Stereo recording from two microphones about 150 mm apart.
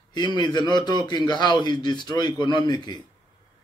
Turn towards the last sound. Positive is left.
turn(degrees=25)  # may be behind; listen again after turning